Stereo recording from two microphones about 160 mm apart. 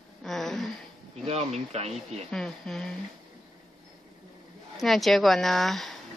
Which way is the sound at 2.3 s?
5° left (ahead or behind).